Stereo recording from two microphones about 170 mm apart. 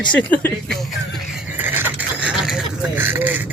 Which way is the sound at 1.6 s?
10° right (ahead or behind).